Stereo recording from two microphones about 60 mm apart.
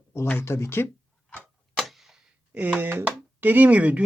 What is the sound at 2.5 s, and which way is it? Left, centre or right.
Speech, right.